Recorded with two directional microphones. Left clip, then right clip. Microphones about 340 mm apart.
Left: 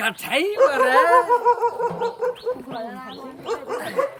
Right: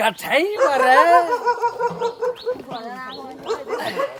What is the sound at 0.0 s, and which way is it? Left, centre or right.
A woman's voice, centre.